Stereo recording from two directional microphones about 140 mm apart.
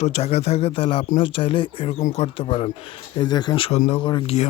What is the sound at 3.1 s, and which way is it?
Speech, 30° left (ahead or behind).